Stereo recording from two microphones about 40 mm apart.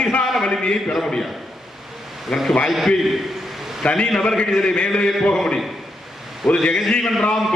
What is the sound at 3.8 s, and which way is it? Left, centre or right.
A man's voice, left.